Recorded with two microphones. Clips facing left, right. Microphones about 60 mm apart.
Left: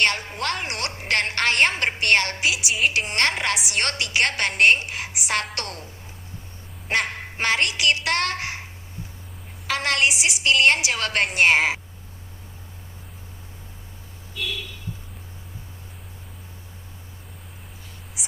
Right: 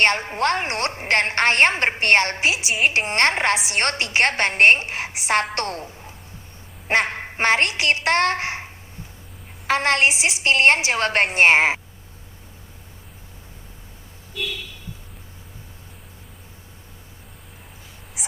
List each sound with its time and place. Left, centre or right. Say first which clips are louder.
0.0 s a woman's voice: right 4 dB; right
9.6 s a woman's voice: right 4 dB; right